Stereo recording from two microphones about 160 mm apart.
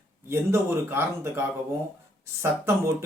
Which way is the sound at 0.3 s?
15° right (ahead or behind).